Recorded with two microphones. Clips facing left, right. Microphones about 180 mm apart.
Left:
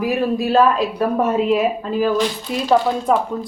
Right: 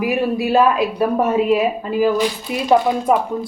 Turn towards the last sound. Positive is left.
turn(degrees=-10)  # may be behind; listen again after turning